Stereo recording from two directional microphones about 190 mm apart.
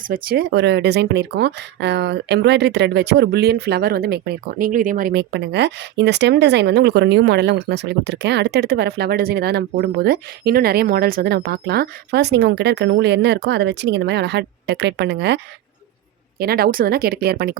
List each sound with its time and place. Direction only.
0.0 s speech: 50° right (ahead or behind)
16.4 s speech: 55° right (ahead or behind)